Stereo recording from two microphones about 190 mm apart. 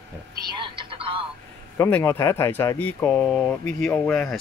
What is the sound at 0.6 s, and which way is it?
Telephone, 25° right (ahead or behind).